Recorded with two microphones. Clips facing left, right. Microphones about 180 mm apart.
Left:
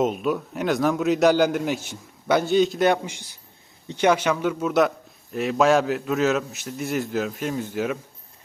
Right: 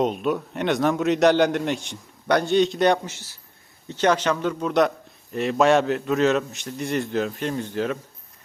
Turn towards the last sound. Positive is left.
turn(degrees=10)  # may be behind; listen again after turning